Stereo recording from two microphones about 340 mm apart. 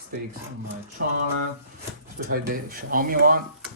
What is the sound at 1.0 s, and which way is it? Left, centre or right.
Speech, right.